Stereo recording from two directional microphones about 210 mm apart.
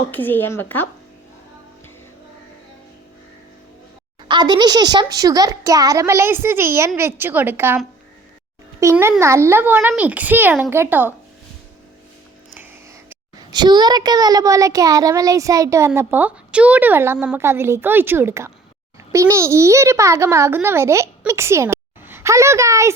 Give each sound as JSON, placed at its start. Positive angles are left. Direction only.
{"t": 0.1, "sound": "a woman's voice", "side_deg": 10}
{"t": 4.3, "sound": "a child's voice", "side_deg": -20}
{"t": 8.8, "sound": "a child's voice", "side_deg": -15}
{"t": 13.1, "sound": "a child's voice", "side_deg": -20}